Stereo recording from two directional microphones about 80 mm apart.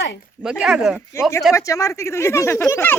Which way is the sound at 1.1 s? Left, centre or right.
Left.